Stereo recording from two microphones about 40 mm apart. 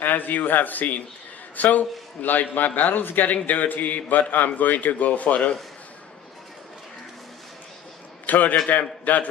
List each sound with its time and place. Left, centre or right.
0.0 s a man's voice: left
8.3 s a man's voice: left